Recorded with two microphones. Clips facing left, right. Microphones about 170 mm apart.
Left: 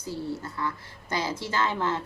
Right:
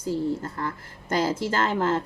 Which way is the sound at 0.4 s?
45° right (ahead or behind).